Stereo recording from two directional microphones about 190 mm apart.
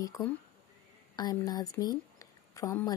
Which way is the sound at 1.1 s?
20° left (ahead or behind).